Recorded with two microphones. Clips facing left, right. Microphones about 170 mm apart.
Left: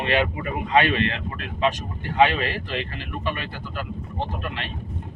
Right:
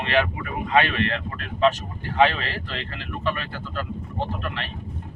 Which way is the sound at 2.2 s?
15° left (ahead or behind).